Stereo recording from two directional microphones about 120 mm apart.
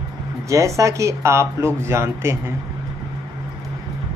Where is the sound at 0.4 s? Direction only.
25° right (ahead or behind).